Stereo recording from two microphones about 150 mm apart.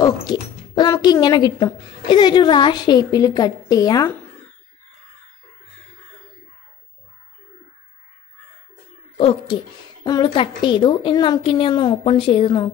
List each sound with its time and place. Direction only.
0.0 s speech: 25° left (ahead or behind)
9.1 s speech: 40° left (ahead or behind)
10.0 s a woman's voice: 30° left (ahead or behind)